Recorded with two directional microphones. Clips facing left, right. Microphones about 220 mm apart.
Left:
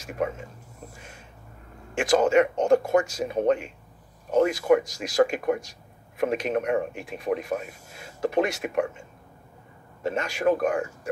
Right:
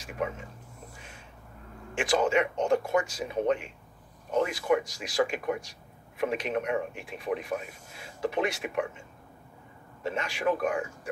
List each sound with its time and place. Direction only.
2.0 s a man's voice: 45° left (ahead or behind)
10.0 s a man's voice: 45° left (ahead or behind)